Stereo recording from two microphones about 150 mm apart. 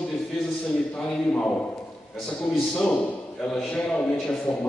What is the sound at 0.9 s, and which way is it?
A man's voice, 5° left (ahead or behind).